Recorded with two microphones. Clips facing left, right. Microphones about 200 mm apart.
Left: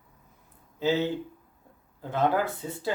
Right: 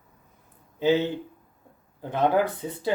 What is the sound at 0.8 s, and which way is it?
Speech, 20° right (ahead or behind).